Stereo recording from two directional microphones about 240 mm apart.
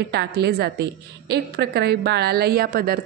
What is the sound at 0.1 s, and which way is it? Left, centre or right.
A woman's voice, right.